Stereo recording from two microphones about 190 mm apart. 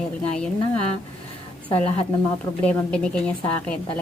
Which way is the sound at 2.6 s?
5° left (ahead or behind).